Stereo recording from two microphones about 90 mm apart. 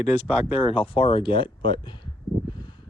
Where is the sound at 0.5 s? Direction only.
85° left.